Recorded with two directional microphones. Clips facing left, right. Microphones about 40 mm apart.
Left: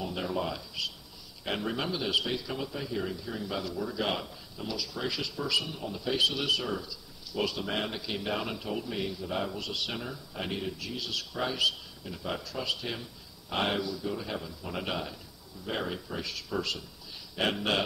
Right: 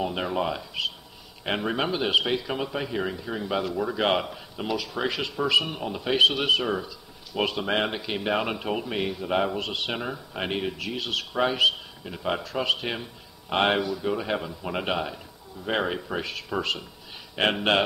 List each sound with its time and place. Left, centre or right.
0.0 s speech: right